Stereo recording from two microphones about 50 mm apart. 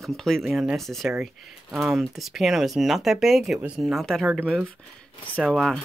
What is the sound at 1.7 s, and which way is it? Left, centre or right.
Speech, centre.